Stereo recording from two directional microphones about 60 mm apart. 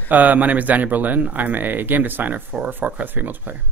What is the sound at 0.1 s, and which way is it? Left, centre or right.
Speech, right.